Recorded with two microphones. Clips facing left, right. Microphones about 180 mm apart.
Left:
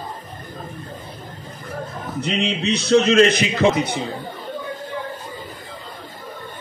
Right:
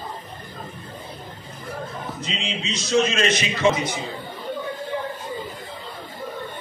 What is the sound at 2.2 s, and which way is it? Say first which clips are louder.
A man's voice: left 11 dB; 65° left (ahead or behind).